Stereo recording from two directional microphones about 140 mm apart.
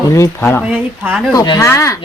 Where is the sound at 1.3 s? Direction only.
25° left (ahead or behind).